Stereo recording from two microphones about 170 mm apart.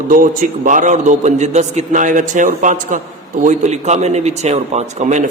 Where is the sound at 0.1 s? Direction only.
55° right (ahead or behind).